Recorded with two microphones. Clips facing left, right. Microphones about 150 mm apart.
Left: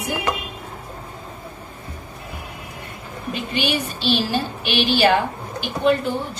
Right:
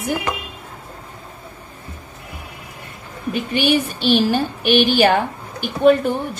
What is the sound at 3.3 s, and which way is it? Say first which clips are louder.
A woman's voice: right 6 dB; 55° right (ahead or behind).